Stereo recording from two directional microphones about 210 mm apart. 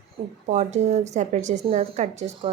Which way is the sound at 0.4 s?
35° right (ahead or behind).